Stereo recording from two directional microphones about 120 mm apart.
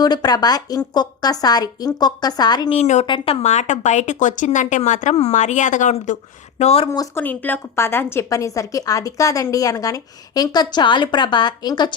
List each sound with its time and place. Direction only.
0.0 s a woman's voice: 35° left (ahead or behind)
2.6 s a woman's voice: 65° left (ahead or behind)
3.4 s speech: 75° left (ahead or behind); by 6.1 s 90° left
6.6 s a woman's voice: 60° left (ahead or behind)
6.9 s a woman's voice: 30° left (ahead or behind)
7.2 s a woman's voice: 15° left (ahead or behind); by 11.9 s 40° left (ahead or behind)